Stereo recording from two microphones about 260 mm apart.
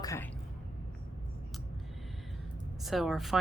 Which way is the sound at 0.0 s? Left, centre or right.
Centre.